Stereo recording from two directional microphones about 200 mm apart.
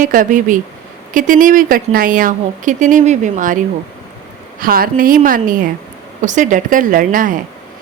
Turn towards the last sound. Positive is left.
turn(degrees=-45)  # may be behind; listen again after turning